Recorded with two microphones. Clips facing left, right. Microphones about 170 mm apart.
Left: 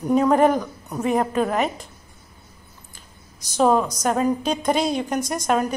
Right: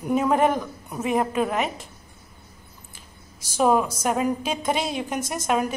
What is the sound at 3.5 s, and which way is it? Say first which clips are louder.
A woman's voice: left 2 dB; 5° right (ahead or behind).